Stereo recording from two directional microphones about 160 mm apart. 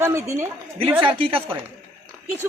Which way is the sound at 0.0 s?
15° right (ahead or behind).